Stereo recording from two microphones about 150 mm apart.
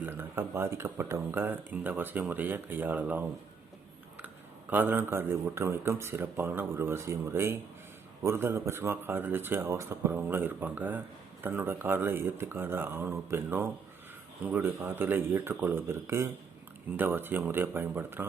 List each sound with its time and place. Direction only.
0.0 s a man's voice: 15° right (ahead or behind)
4.7 s a man's voice: 10° right (ahead or behind)